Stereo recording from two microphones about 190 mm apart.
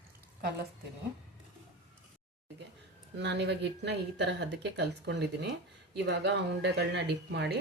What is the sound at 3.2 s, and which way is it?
Speech, 65° right (ahead or behind).